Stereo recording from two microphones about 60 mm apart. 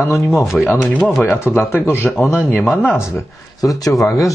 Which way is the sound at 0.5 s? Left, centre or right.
Centre.